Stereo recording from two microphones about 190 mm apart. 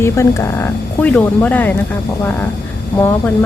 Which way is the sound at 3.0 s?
10° left (ahead or behind).